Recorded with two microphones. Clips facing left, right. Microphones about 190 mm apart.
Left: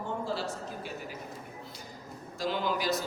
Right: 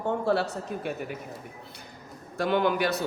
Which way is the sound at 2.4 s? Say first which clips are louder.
Right 7 dB; 60° right (ahead or behind).